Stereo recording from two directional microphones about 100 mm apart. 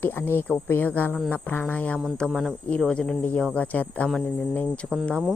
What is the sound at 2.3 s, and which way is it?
Speech, centre (ahead or behind).